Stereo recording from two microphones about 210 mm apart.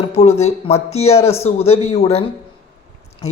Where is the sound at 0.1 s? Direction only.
30° left (ahead or behind).